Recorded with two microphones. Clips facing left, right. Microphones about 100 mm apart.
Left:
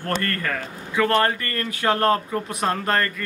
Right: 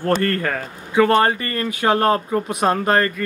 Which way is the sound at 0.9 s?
25° right (ahead or behind).